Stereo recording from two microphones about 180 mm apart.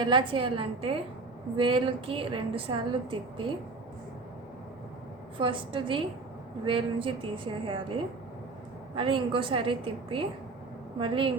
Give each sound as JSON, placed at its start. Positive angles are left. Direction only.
{"t": 0.0, "sound": "a woman's voice", "side_deg": -25}
{"t": 5.4, "sound": "a woman's voice", "side_deg": -30}
{"t": 9.0, "sound": "a woman's voice", "side_deg": -30}